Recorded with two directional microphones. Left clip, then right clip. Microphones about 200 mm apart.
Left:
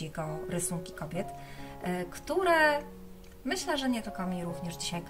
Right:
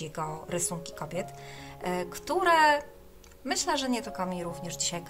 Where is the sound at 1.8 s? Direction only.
55° right (ahead or behind).